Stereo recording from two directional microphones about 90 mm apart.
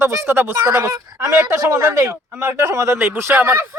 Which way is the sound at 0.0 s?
30° right (ahead or behind).